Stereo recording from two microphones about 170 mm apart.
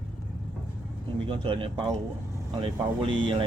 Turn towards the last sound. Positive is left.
turn(degrees=-30)  # may be behind; listen again after turning